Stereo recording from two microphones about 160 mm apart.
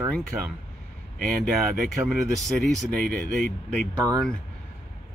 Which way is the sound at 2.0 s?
Centre (ahead or behind).